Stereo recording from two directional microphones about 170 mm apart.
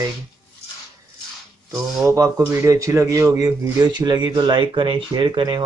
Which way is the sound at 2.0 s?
20° right (ahead or behind).